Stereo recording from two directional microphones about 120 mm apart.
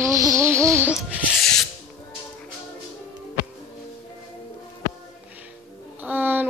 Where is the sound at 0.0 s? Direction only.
25° right (ahead or behind).